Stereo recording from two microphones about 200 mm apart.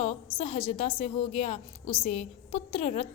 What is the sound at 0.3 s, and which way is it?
A woman's voice, 30° left (ahead or behind).